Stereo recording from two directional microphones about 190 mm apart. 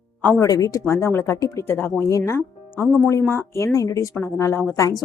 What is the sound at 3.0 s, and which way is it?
Speech, 10° left (ahead or behind).